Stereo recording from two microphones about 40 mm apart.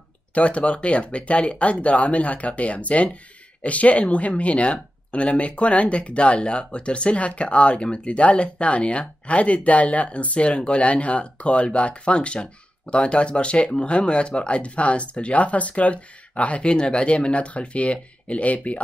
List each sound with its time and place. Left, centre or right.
0.3 s speech: left